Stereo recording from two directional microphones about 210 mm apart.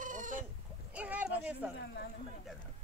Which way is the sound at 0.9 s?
5° right (ahead or behind).